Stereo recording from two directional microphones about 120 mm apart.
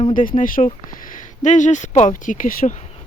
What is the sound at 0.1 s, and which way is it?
Speech, 90° left.